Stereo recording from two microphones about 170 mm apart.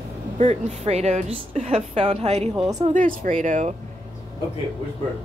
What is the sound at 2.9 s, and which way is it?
Speech, 55° right (ahead or behind).